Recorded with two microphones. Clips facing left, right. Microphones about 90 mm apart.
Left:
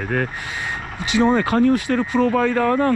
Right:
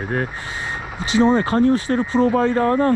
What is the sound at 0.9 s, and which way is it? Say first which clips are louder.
Speech: right 1 dB; 20° right (ahead or behind).